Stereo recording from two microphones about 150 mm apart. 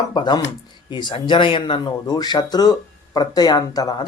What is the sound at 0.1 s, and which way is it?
Speech, 30° left (ahead or behind).